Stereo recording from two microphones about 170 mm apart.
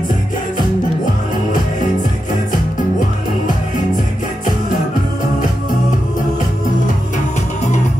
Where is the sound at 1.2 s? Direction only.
50° left (ahead or behind).